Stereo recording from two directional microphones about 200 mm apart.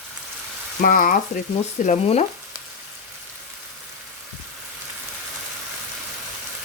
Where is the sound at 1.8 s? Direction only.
35° left (ahead or behind).